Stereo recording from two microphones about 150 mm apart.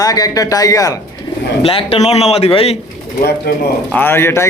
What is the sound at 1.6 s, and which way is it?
A man's voice, 40° left (ahead or behind).